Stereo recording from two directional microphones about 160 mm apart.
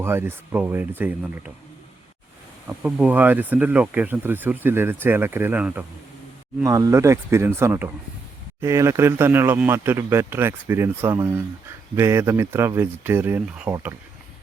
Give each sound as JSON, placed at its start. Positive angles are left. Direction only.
{"t": 0.0, "sound": "speech", "side_deg": -15}
{"t": 2.6, "sound": "speech", "side_deg": -10}
{"t": 6.6, "sound": "speech", "side_deg": -20}